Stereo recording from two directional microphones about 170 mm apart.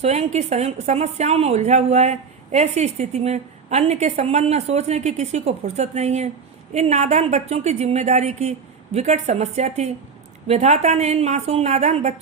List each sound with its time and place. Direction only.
0.0 s a woman's voice: 40° right (ahead or behind)